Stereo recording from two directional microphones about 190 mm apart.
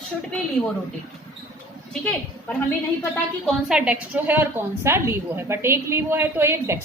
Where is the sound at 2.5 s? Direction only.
5° left (ahead or behind).